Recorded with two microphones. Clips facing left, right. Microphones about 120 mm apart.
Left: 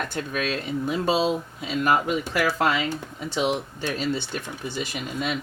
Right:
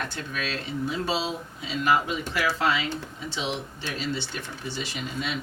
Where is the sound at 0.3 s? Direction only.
50° left (ahead or behind).